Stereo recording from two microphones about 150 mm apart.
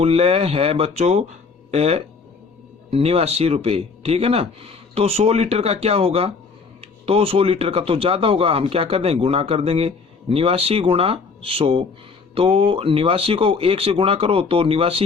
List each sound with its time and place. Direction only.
0.0 s speech: 40° right (ahead or behind)